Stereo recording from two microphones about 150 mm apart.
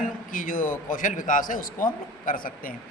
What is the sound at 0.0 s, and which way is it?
A man's voice, 65° left (ahead or behind).